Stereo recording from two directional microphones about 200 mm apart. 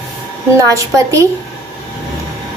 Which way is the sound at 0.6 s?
15° right (ahead or behind).